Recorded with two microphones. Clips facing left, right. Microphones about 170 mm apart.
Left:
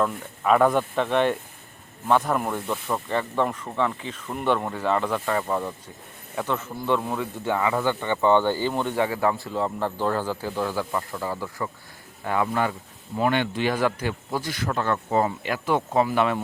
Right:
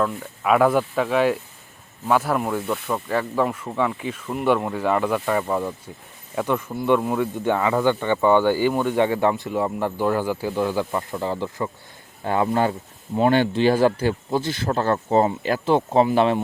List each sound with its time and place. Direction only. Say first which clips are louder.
0.0 s speech: right 1 dB; 5° right (ahead or behind)
9.0 s speech: right 4 dB; 25° right (ahead or behind)